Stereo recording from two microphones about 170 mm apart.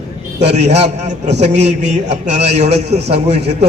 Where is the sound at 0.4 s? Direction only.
40° right (ahead or behind).